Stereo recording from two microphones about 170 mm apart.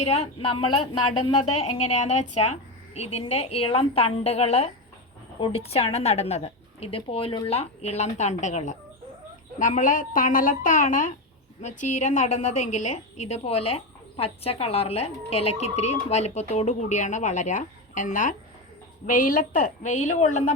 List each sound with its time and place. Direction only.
0.0 s a woman's voice: 40° left (ahead or behind)